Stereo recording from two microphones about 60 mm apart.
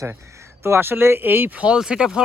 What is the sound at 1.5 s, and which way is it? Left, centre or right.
Speech, centre.